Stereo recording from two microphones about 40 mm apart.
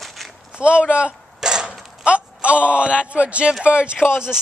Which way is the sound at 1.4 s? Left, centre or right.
Centre.